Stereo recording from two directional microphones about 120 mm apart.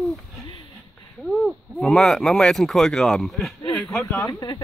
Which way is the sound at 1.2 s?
Centre (ahead or behind).